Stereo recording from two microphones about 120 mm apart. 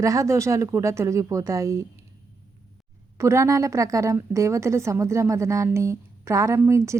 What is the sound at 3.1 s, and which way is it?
A woman's voice, 25° right (ahead or behind).